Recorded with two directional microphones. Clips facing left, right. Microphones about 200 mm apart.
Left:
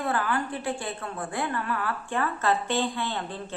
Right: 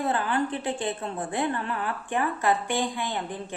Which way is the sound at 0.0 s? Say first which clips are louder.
Right 2 dB; 20° right (ahead or behind).